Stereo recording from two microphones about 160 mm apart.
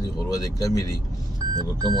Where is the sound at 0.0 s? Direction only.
20° left (ahead or behind).